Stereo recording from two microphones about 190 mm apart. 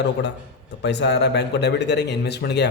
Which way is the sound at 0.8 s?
65° left (ahead or behind).